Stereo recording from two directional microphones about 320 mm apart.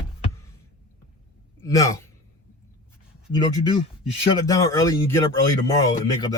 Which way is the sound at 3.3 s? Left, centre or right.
Centre.